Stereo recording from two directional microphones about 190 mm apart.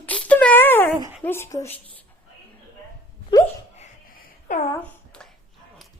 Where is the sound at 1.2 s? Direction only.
10° left (ahead or behind).